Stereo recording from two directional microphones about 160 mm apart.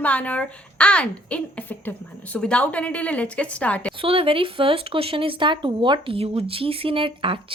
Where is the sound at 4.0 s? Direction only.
35° right (ahead or behind).